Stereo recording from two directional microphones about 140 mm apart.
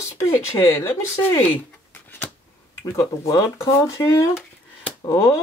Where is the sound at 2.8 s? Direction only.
25° left (ahead or behind).